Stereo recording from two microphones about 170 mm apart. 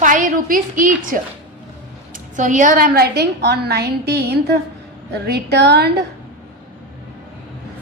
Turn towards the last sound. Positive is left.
turn(degrees=-75)  # may be behind; listen again after turning